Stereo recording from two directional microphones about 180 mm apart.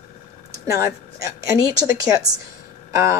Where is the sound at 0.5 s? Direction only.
15° right (ahead or behind).